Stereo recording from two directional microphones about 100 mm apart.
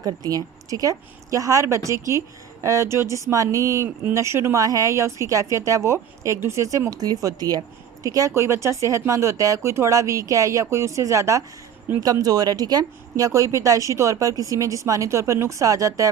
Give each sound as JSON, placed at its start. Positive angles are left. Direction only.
{"t": 0.0, "sound": "speech", "side_deg": -40}
{"t": 11.9, "sound": "speech", "side_deg": -20}
{"t": 12.2, "sound": "speech", "side_deg": -40}